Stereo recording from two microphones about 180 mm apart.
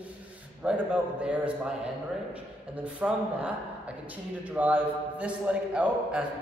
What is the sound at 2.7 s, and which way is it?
A man's voice, 10° right (ahead or behind).